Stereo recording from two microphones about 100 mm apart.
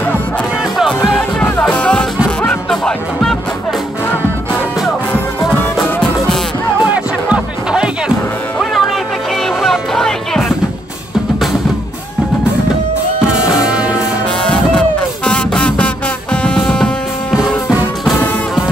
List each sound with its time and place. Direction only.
1.4 s music: 15° left (ahead or behind)
2.7 s music: 5° left (ahead or behind)
5.5 s music: 20° left (ahead or behind)
6.8 s music: 10° right (ahead or behind); by 10.4 s 5° left (ahead or behind)
13.3 s music: 5° right (ahead or behind)
14.4 s music: 10° left (ahead or behind)
17.3 s music: 5° right (ahead or behind)